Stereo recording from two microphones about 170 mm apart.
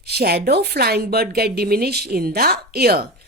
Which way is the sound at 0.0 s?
70° right (ahead or behind).